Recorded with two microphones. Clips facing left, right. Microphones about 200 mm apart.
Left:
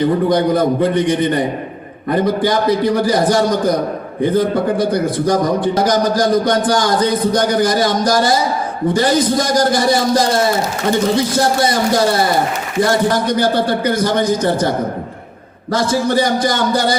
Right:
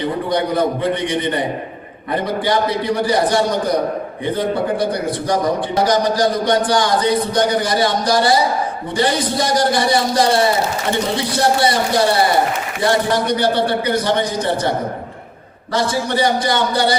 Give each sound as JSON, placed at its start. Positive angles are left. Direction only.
{"t": 0.0, "sound": "a man's voice", "side_deg": 45}
{"t": 13.2, "sound": "a man's voice", "side_deg": 45}
{"t": 15.7, "sound": "a man's voice", "side_deg": 45}